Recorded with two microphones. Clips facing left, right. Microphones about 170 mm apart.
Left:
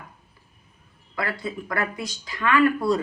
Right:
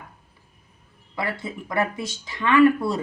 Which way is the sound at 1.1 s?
25° right (ahead or behind).